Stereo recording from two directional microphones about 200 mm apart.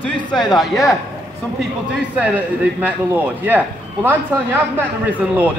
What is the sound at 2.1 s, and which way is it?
A man's voice, 10° right (ahead or behind).